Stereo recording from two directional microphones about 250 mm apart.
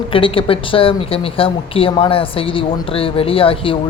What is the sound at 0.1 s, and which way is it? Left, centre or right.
Speech, left.